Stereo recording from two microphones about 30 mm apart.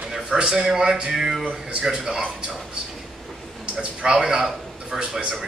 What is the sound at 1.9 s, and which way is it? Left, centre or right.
Speech, centre.